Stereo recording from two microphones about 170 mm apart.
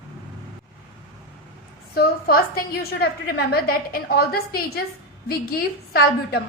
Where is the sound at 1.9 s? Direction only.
60° left (ahead or behind).